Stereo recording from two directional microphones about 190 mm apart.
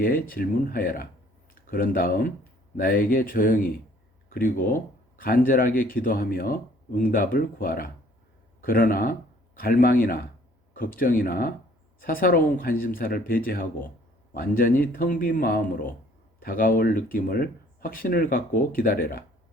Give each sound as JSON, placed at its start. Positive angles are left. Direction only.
{"t": 0.0, "sound": "speech", "side_deg": 50}